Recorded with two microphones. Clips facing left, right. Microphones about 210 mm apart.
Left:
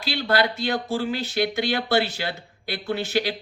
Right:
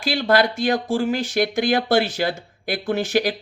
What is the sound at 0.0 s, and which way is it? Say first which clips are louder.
Speech: right 4 dB; 50° right (ahead or behind).